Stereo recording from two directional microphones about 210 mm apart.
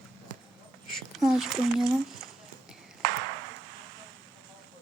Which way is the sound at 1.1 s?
Centre (ahead or behind).